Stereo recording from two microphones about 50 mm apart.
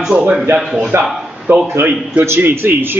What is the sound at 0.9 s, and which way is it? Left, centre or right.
Speech, right.